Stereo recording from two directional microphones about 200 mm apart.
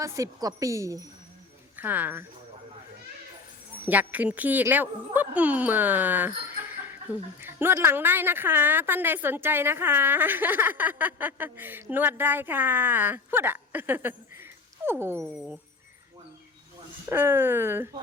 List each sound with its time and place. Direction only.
0.0 s speech: 15° right (ahead or behind)
3.8 s speech: 10° right (ahead or behind)
17.1 s speech: 10° right (ahead or behind)